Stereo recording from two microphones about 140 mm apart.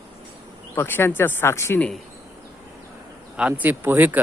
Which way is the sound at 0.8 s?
15° left (ahead or behind).